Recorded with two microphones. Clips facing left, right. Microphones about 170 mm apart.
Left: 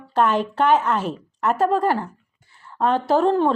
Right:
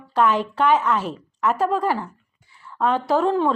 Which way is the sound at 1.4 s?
50° left (ahead or behind).